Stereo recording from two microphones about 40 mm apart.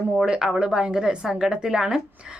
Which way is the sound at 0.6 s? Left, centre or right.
Right.